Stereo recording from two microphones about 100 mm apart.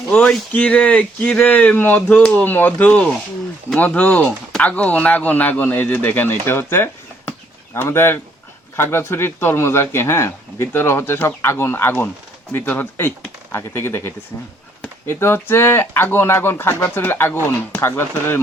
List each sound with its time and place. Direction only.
0.1 s speech: 5° left (ahead or behind)
6.4 s a sound: 25° left (ahead or behind)
8.7 s speech: 25° left (ahead or behind)